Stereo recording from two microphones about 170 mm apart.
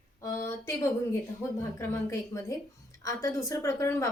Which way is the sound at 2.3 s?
20° left (ahead or behind).